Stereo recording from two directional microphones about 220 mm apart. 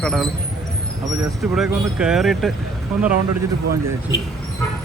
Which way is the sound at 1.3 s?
Centre (ahead or behind).